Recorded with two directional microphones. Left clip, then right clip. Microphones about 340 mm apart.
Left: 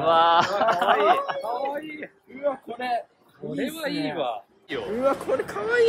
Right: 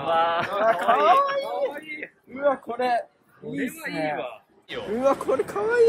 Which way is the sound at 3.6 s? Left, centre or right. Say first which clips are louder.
Left 1 dB; left.